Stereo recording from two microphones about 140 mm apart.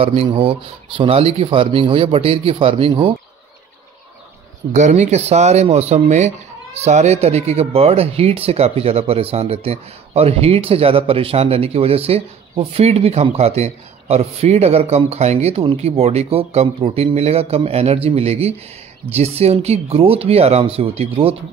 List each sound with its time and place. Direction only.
0.0 s speech: 40° right (ahead or behind)
4.7 s speech: 60° right (ahead or behind)